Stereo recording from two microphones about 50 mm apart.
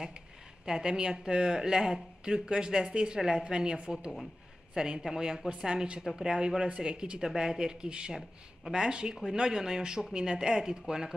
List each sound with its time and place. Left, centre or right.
0.7 s speech: centre